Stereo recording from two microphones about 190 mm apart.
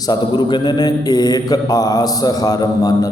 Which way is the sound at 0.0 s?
20° left (ahead or behind).